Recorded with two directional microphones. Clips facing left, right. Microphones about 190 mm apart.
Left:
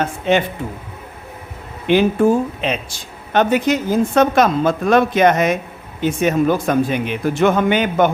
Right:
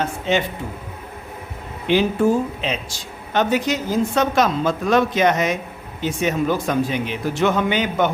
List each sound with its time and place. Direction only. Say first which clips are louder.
0.0 s a woman's voice: left 4 dB; 55° left (ahead or behind)
1.9 s a woman's voice: left 3 dB; 55° left (ahead or behind)